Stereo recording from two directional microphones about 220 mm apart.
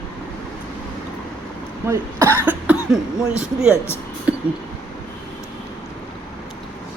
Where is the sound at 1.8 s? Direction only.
10° right (ahead or behind).